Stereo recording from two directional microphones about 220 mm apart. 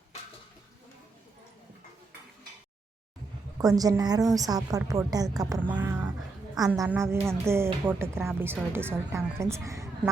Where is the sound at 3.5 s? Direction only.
15° right (ahead or behind).